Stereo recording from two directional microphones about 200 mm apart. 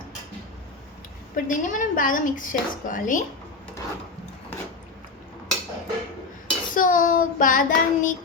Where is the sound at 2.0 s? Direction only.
40° left (ahead or behind).